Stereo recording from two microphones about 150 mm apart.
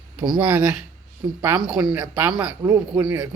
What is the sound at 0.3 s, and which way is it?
Speech, 15° right (ahead or behind).